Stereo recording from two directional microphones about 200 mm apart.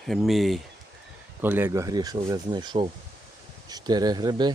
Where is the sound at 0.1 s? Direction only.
Centre (ahead or behind); by 4.5 s 20° right (ahead or behind).